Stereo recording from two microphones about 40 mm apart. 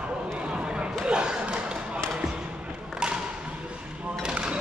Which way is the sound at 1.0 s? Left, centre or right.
Right.